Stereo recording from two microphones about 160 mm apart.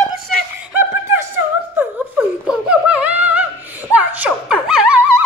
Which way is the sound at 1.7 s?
10° right (ahead or behind).